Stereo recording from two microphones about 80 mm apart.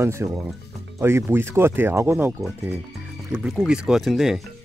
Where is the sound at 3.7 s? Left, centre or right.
Centre.